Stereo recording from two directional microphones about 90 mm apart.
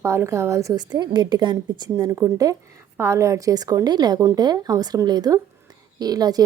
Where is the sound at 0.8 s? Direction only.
50° right (ahead or behind).